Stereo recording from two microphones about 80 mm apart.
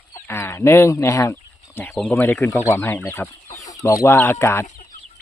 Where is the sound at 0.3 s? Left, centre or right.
Left.